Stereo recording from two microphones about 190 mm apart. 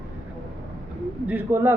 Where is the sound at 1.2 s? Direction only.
10° right (ahead or behind).